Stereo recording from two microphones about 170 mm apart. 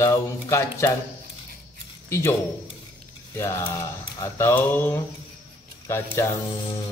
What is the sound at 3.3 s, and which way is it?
Speech, 15° left (ahead or behind).